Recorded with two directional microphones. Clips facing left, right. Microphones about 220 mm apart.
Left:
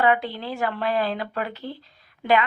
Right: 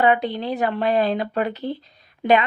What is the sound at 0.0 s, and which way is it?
Speech, 20° right (ahead or behind).